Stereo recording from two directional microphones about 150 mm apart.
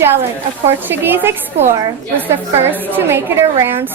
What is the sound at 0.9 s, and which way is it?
Speech, 15° right (ahead or behind).